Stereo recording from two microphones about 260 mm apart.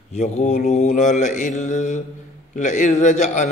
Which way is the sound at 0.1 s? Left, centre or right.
Left.